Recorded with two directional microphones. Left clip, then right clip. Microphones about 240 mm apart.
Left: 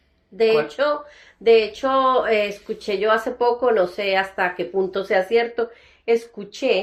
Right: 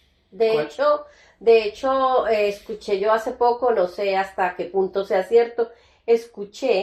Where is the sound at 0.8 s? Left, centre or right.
Left.